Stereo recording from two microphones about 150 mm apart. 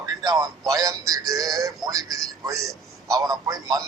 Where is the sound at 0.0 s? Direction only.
25° right (ahead or behind).